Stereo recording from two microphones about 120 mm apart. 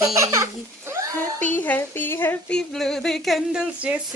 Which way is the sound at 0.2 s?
25° right (ahead or behind).